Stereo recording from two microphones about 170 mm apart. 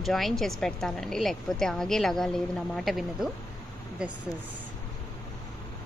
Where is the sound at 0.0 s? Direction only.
Centre (ahead or behind).